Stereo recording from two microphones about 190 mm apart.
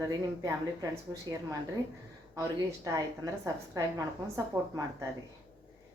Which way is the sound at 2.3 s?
20° right (ahead or behind).